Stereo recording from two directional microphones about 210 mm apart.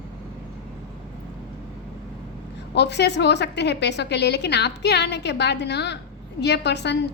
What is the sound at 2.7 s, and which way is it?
A woman's voice, 55° left (ahead or behind).